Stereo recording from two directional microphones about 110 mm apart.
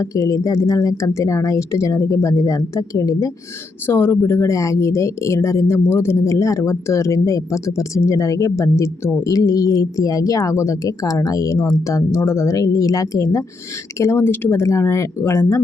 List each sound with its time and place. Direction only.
0.0 s speech: 30° left (ahead or behind)
3.8 s speech: 20° left (ahead or behind)